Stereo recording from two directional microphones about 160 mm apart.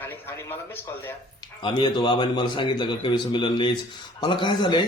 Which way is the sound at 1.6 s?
30° left (ahead or behind).